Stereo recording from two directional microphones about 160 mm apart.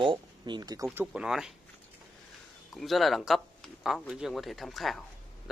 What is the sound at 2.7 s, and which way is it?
A man's voice, centre (ahead or behind).